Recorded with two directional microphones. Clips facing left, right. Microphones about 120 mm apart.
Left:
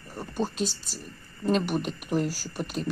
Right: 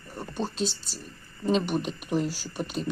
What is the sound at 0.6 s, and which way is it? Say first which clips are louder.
Speech: even; 45° left (ahead or behind).